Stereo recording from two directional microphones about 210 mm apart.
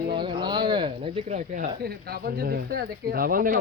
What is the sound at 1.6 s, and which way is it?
Speech, 45° right (ahead or behind).